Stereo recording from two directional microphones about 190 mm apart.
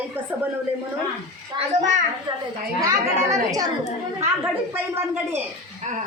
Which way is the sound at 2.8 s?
20° right (ahead or behind).